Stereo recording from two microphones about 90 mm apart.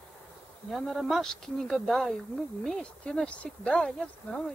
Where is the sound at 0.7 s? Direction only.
5° left (ahead or behind).